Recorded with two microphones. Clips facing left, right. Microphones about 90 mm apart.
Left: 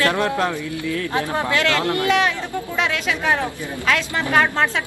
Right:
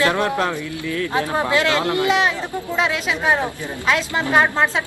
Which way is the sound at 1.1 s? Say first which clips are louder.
Right 3 dB; 25° right (ahead or behind).